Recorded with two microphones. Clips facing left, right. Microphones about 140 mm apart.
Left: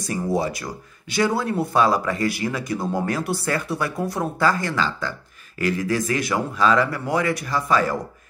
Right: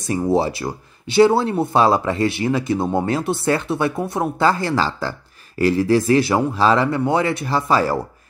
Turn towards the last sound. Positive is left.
turn(degrees=-30)  # may be behind; listen again after turning